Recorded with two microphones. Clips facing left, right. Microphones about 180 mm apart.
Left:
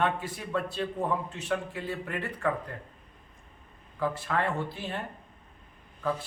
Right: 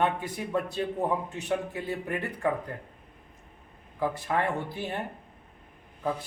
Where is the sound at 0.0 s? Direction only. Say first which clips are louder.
Right 1 dB; 20° right (ahead or behind).